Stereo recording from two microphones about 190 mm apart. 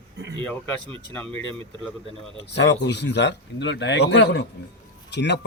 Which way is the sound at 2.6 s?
65° left (ahead or behind).